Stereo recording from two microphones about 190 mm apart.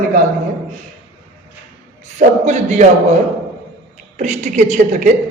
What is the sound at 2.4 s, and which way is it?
Speech, 35° right (ahead or behind).